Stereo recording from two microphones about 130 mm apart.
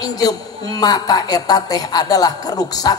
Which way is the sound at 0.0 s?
30° left (ahead or behind).